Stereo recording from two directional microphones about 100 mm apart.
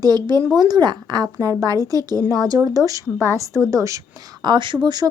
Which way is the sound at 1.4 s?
35° right (ahead or behind).